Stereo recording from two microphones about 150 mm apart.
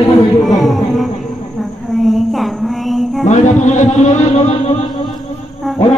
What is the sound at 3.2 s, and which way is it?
Speech, 55° left (ahead or behind).